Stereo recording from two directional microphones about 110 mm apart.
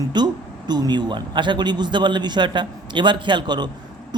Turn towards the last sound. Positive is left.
turn(degrees=-45)  # may be behind; listen again after turning